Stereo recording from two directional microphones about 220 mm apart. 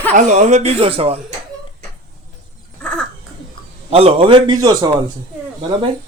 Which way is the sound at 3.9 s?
25° right (ahead or behind).